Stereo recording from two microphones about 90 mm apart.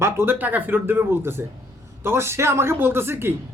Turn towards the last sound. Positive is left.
turn(degrees=-25)  # may be behind; listen again after turning